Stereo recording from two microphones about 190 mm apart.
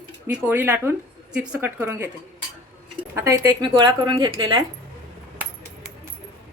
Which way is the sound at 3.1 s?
15° right (ahead or behind).